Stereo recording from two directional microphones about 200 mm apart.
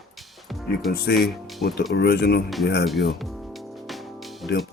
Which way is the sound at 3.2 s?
Centre (ahead or behind).